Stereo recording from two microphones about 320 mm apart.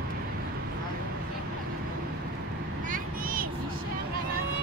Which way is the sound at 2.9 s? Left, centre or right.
Right.